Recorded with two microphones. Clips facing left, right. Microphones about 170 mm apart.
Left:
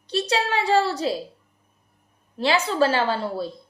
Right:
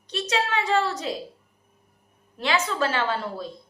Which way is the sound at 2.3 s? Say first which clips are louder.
Left 4 dB; 30° left (ahead or behind).